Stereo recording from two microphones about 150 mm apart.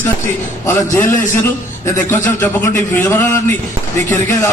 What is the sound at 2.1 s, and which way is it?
A man's voice, 10° left (ahead or behind).